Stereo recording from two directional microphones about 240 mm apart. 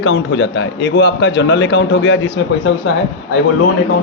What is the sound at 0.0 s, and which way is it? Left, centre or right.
A man's voice, left.